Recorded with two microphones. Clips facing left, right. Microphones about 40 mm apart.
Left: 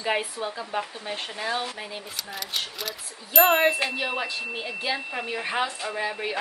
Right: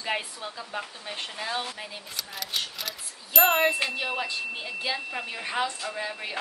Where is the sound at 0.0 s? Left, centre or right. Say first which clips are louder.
Left 4 dB; centre.